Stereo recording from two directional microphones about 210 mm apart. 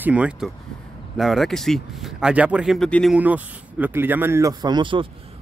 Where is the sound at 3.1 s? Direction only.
5° right (ahead or behind); by 5.1 s 25° right (ahead or behind).